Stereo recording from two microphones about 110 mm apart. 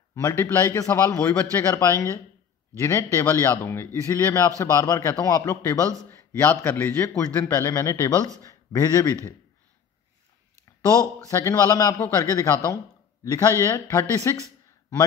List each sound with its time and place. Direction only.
0.1 s a man's voice: 25° left (ahead or behind)
7.5 s a man's voice: 30° left (ahead or behind)
11.2 s speech: 30° left (ahead or behind)